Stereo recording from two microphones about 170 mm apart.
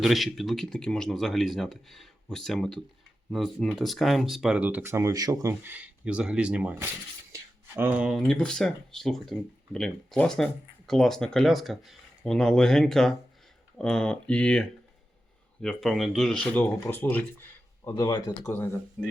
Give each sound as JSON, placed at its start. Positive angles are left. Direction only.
{"t": 0.0, "sound": "speech", "side_deg": 0}
{"t": 17.8, "sound": "speech", "side_deg": 20}
{"t": 19.0, "sound": "speech", "side_deg": 5}